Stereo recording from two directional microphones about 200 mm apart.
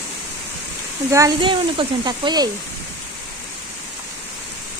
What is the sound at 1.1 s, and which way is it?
Speech, 20° right (ahead or behind).